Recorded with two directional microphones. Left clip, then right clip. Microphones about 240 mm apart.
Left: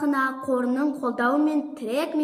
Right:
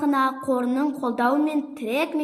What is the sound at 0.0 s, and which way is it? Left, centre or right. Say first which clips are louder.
A woman's voice: right 2 dB; right.